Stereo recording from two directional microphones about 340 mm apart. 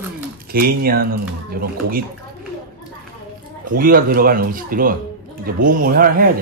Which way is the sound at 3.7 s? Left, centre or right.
Right.